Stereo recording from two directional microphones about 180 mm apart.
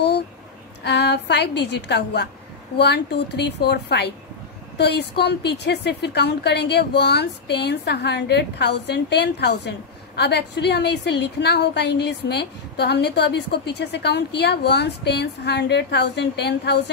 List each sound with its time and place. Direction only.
0.8 s a woman's voice: 70° left (ahead or behind)